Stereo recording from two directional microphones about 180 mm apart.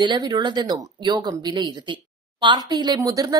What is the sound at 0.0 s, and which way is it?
Speech, 25° right (ahead or behind).